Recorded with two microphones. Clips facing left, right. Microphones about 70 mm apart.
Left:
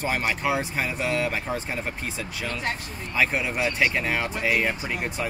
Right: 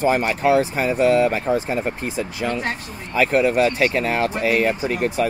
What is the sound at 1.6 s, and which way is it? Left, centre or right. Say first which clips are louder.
Speech: right 7 dB; right.